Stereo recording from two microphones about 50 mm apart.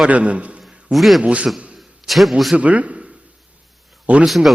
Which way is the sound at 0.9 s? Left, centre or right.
Centre.